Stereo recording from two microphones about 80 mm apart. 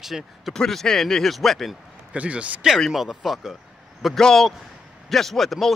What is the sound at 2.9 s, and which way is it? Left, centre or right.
Speech, centre.